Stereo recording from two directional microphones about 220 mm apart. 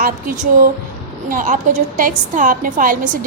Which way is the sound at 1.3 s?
35° right (ahead or behind).